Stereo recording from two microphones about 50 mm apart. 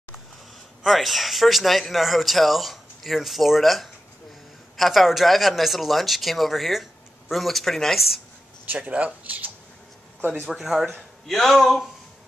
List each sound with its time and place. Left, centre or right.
0.8 s speech: centre
8.7 s speech: right
10.5 s speech: centre